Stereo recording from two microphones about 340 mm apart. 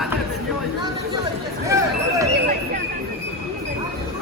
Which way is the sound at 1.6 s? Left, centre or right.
Centre.